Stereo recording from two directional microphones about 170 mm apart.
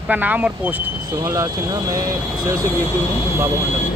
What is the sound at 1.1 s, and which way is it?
Speech, 20° right (ahead or behind).